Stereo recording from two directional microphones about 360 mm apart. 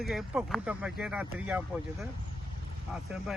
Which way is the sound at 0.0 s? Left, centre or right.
Centre.